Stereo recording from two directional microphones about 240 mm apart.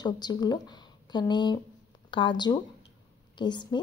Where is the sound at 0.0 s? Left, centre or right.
Centre.